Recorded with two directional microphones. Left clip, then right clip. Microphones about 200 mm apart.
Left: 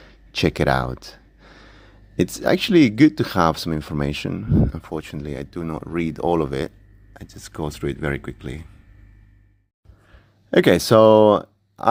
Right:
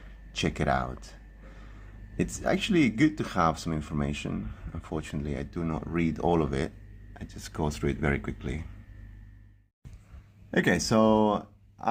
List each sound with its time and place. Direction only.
0.3 s speech: 35° left (ahead or behind)
10.5 s speech: 45° left (ahead or behind)